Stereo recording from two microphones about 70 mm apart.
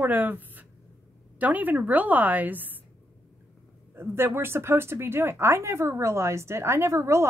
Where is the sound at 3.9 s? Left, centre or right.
Right.